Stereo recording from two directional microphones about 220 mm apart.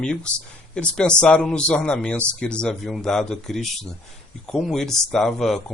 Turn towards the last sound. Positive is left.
turn(degrees=0)  # may be behind; listen again after turning